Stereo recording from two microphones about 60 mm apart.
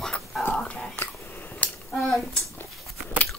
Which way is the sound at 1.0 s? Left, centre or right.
Left.